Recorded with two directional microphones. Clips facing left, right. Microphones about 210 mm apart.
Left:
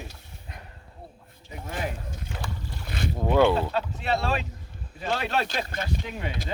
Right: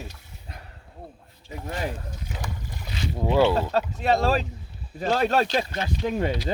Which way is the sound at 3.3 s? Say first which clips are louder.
Even; 5° right (ahead or behind).